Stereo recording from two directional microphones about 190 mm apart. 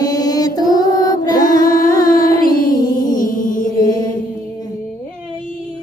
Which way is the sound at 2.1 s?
45° left (ahead or behind).